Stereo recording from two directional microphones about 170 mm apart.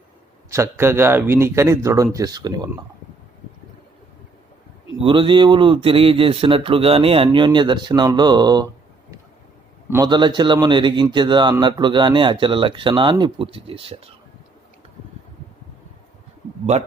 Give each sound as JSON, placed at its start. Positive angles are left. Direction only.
{"t": 0.5, "sound": "speech", "side_deg": -15}
{"t": 4.9, "sound": "a man's voice", "side_deg": -30}
{"t": 9.9, "sound": "speech", "side_deg": -25}